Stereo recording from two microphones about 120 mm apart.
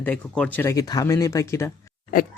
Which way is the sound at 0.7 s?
30° left (ahead or behind).